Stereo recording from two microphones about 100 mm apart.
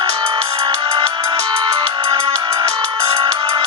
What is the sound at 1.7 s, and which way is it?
Music, 60° right (ahead or behind).